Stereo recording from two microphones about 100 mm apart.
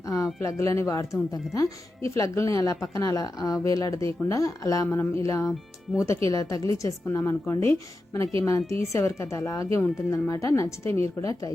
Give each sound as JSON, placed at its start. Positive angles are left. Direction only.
{"t": 0.0, "sound": "a sound", "side_deg": 35}
{"t": 0.4, "sound": "speech", "side_deg": 30}
{"t": 5.5, "sound": "speech", "side_deg": -5}
{"t": 6.2, "sound": "a woman's voice", "side_deg": 35}